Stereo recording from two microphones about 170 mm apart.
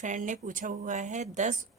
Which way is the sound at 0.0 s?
45° right (ahead or behind).